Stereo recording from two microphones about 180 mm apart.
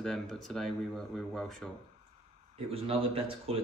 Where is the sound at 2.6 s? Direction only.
30° right (ahead or behind).